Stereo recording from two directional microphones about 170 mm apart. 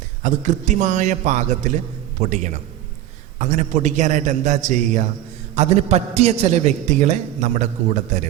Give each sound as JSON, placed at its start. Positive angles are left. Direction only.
{"t": 0.2, "sound": "a man's voice", "side_deg": -45}